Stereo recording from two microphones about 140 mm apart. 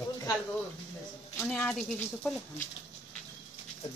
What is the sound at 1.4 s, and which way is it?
Speech, centre (ahead or behind).